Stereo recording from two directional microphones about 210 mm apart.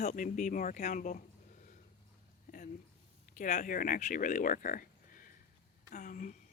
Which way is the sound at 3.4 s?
35° left (ahead or behind).